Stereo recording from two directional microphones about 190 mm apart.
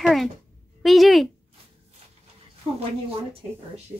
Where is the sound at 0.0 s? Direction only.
Centre (ahead or behind).